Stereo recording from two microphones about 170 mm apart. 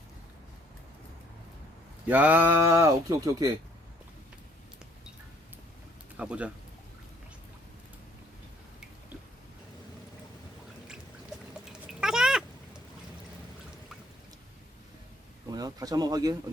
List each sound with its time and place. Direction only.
2.0 s speech: 10° right (ahead or behind)
6.1 s speech: 5° right (ahead or behind)
11.6 s cat: 5° right (ahead or behind)
15.4 s speech: 20° right (ahead or behind)